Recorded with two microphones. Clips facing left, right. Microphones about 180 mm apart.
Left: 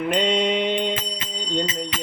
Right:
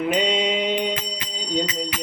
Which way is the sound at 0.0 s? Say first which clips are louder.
Left 1 dB; 5° right (ahead or behind).